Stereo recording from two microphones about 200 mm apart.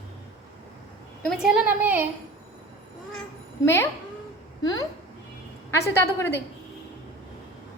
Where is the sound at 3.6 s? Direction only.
15° left (ahead or behind).